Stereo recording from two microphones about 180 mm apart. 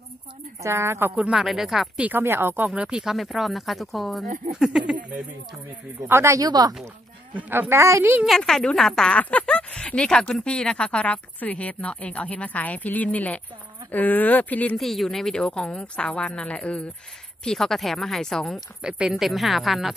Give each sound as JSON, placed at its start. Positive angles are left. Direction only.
{"t": 0.6, "sound": "speech", "side_deg": -15}
{"t": 5.9, "sound": "a woman's voice", "side_deg": -15}
{"t": 7.3, "sound": "a woman's voice", "side_deg": -10}
{"t": 8.3, "sound": "speech", "side_deg": 0}